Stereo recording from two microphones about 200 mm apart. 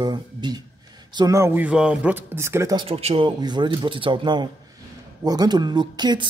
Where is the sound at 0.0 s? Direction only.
20° right (ahead or behind).